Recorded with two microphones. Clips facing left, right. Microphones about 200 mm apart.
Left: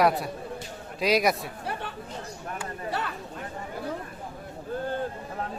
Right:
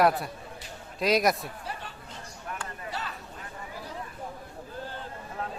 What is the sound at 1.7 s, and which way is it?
Chatter, 60° left (ahead or behind).